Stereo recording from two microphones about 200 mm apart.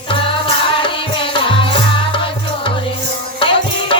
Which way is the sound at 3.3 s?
25° left (ahead or behind).